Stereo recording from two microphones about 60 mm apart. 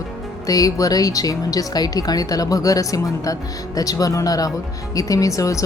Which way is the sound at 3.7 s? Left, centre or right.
Left.